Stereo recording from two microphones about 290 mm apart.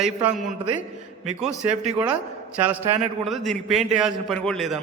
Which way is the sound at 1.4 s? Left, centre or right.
Centre.